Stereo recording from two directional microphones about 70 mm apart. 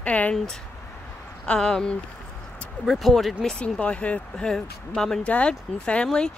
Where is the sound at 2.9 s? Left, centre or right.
Centre.